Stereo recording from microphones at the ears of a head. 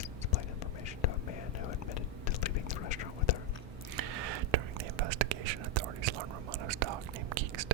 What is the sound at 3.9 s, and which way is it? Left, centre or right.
Whispering, right.